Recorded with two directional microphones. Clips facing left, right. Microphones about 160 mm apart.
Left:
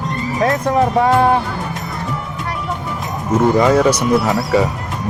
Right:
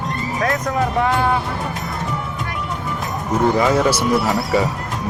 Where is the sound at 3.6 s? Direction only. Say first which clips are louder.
Left 4 dB; 5° right (ahead or behind).